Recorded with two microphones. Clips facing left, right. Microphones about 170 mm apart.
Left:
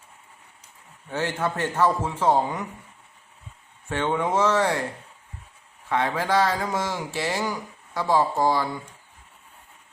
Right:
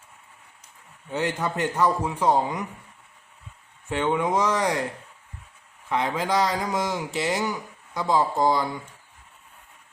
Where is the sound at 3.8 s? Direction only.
15° right (ahead or behind).